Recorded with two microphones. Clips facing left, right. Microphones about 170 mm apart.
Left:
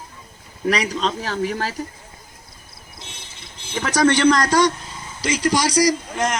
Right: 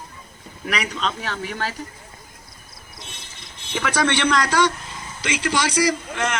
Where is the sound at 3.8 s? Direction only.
40° left (ahead or behind).